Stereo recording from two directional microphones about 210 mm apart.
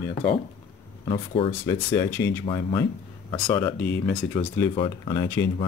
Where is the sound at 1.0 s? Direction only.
25° left (ahead or behind).